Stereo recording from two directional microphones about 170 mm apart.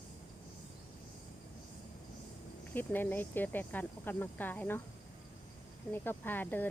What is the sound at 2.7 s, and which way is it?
Speech, 10° left (ahead or behind).